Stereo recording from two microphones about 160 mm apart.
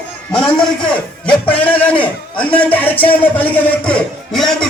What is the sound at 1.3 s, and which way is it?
A man's voice, 10° left (ahead or behind).